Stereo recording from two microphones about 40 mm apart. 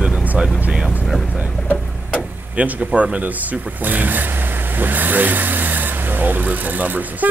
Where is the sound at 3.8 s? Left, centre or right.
Right.